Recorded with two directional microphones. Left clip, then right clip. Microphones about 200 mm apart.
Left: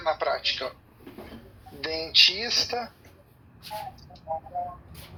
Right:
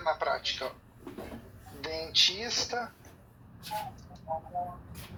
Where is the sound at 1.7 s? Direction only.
30° left (ahead or behind).